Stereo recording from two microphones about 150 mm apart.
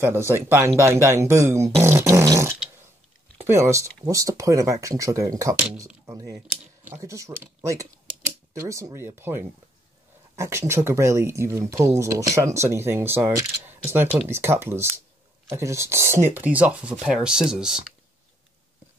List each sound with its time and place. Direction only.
0.0 s speech: 15° right (ahead or behind)